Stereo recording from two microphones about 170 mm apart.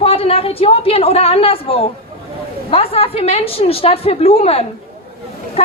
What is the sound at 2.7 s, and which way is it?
A woman's voice, 35° left (ahead or behind).